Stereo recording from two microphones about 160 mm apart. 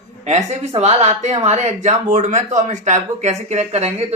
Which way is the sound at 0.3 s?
45° right (ahead or behind).